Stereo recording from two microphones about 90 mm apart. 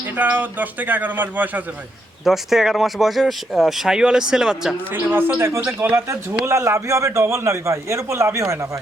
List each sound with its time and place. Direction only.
0.2 s a man's voice: 20° right (ahead or behind)
2.2 s speech: 5° right (ahead or behind)
4.9 s a man's voice: 25° right (ahead or behind)
6.1 s a man's voice: 35° right (ahead or behind)